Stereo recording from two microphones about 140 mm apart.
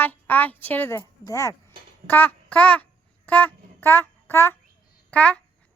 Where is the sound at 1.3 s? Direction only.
20° left (ahead or behind).